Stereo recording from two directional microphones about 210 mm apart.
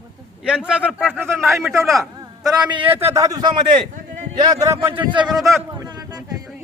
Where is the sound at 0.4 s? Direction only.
5° right (ahead or behind).